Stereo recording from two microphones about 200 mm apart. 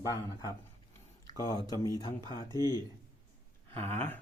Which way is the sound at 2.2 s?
20° right (ahead or behind).